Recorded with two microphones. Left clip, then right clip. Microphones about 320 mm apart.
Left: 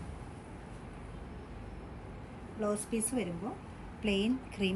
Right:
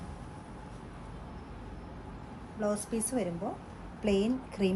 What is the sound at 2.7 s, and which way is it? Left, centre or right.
A woman's voice, centre.